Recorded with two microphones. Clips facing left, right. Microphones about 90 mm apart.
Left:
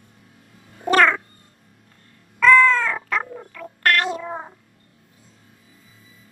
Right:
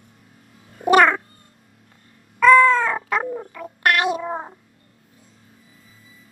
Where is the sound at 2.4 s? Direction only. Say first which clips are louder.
Right 2 dB; 15° right (ahead or behind).